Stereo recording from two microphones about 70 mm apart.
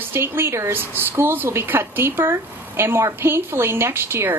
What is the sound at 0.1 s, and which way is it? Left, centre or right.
Speech, right.